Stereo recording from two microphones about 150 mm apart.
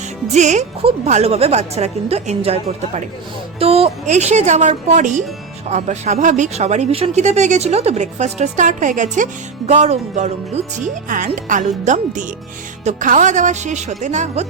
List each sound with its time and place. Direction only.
0.3 s speech: 50° right (ahead or behind)